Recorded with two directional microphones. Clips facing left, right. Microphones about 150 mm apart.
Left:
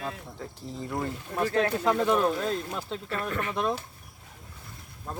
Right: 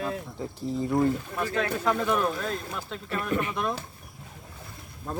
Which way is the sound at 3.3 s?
15° right (ahead or behind).